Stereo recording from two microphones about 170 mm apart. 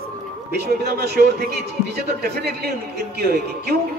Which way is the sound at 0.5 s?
70° right (ahead or behind).